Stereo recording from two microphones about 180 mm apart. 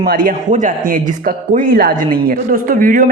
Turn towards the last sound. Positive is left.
turn(degrees=-50)  # may be behind; listen again after turning